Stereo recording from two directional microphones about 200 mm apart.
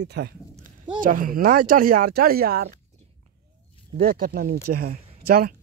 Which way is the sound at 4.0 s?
45° right (ahead or behind).